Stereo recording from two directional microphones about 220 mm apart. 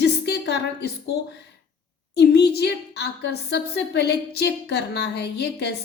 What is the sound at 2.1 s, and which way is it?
A woman's voice, 50° left (ahead or behind).